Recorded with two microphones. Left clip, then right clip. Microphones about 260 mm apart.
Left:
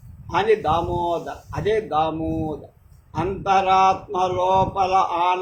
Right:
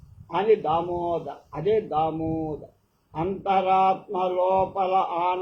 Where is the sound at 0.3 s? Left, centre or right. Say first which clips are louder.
Left 3 dB; left.